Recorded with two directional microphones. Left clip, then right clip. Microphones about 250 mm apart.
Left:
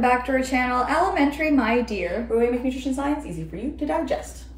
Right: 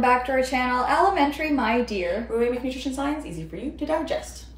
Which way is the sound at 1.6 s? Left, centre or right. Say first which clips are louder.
Left 1 dB; centre.